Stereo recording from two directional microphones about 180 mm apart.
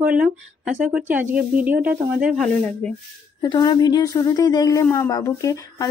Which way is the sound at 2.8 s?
5° left (ahead or behind).